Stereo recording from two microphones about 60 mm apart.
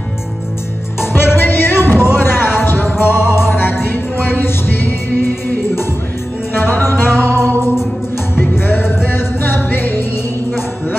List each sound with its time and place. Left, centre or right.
1.1 s music: left